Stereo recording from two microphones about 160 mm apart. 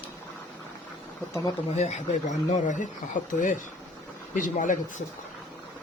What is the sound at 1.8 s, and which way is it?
Speech, 45° left (ahead or behind).